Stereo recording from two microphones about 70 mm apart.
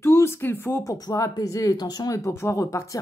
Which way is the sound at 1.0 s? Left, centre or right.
Left.